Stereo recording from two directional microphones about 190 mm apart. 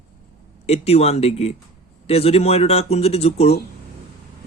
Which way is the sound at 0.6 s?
35° left (ahead or behind).